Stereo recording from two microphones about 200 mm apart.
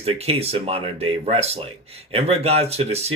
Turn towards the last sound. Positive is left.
turn(degrees=-30)  # may be behind; listen again after turning